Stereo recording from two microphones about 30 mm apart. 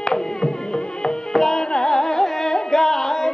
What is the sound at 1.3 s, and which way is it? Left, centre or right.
Music, centre.